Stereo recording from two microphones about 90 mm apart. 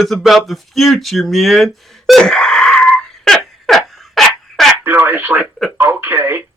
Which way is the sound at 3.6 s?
Centre (ahead or behind).